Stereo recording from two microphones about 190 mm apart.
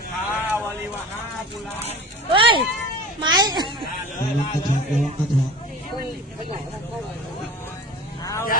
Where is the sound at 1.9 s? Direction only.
25° right (ahead or behind).